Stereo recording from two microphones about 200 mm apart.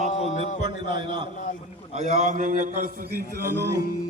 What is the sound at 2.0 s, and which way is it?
Speech, 35° right (ahead or behind).